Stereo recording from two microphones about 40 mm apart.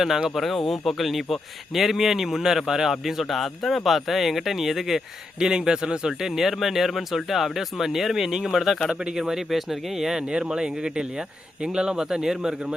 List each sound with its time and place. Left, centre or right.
0.0 s speech: centre
5.4 s speech: centre
6.2 s speech: centre
10.3 s speech: right